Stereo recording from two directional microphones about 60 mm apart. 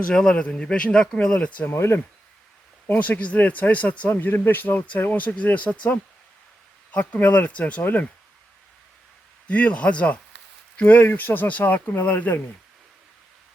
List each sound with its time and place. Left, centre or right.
0.1 s speech: centre
1.7 s speech: left
2.8 s speech: left
4.2 s speech: left
9.5 s speech: left